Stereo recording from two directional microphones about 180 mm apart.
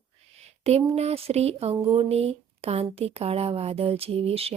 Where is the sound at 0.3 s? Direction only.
35° right (ahead or behind).